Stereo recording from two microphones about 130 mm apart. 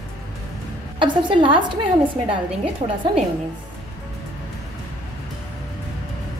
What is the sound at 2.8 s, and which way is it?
Speech, 55° right (ahead or behind).